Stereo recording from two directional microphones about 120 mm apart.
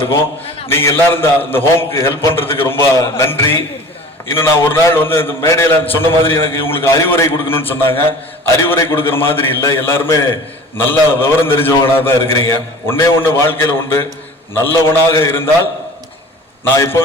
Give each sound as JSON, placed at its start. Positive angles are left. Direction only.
{"t": 0.7, "sound": "a man's voice", "side_deg": 20}
{"t": 16.7, "sound": "a man's voice", "side_deg": 25}